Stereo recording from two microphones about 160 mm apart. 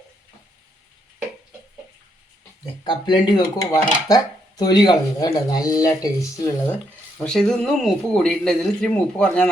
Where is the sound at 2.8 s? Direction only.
30° left (ahead or behind).